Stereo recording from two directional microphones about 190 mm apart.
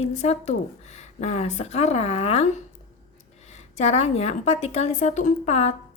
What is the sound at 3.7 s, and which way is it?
A woman's voice, 35° left (ahead or behind).